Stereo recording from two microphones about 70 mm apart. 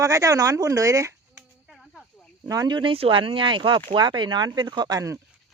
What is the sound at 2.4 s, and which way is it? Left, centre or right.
Speech, right.